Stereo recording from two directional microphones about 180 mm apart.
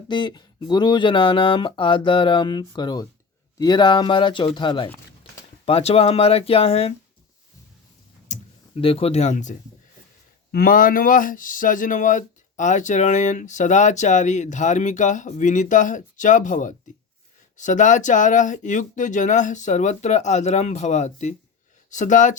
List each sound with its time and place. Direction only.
0.1 s speech: 25° left (ahead or behind)
5.2 s a sound: 30° left (ahead or behind)
5.6 s speech: 35° left (ahead or behind)
8.3 s speech: 30° left (ahead or behind)